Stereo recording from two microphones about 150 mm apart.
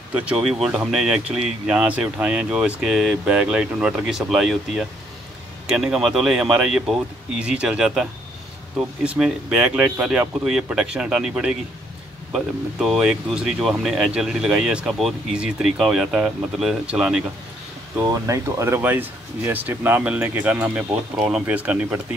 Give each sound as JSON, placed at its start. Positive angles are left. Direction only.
{"t": 0.1, "sound": "speech", "side_deg": -10}
{"t": 18.0, "sound": "speech", "side_deg": -20}